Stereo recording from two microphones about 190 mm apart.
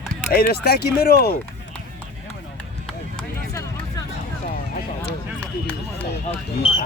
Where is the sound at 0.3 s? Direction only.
55° left (ahead or behind).